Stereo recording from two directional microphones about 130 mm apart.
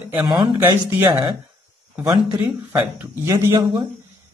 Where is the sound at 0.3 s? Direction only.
35° right (ahead or behind).